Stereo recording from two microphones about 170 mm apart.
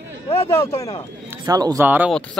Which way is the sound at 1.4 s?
20° right (ahead or behind).